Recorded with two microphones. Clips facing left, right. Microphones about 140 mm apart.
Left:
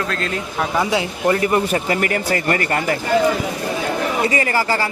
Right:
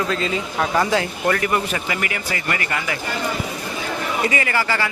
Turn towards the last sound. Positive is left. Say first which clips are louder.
# left 3 dB
turn(degrees=35)  # may be behind; listen again after turning